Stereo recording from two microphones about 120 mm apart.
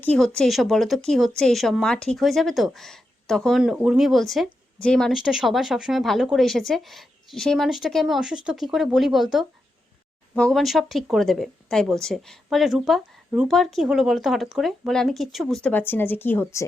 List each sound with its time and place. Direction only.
0.2 s speech: centre (ahead or behind)
3.6 s speech: 5° right (ahead or behind)
15.6 s speech: 15° left (ahead or behind)